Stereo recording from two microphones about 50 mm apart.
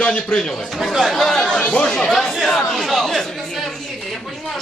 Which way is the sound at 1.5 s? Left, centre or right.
Left.